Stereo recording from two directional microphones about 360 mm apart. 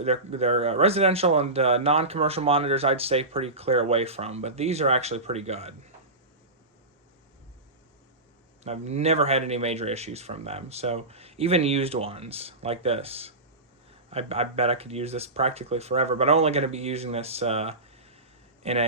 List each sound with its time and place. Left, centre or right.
0.0 s speech: centre
8.6 s a man's voice: centre